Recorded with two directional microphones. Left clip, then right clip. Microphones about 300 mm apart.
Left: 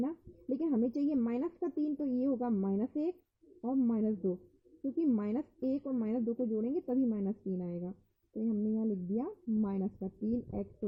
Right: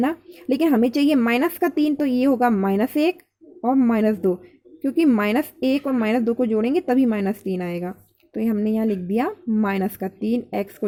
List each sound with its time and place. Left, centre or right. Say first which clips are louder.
0.0 s speech: right 15 dB; right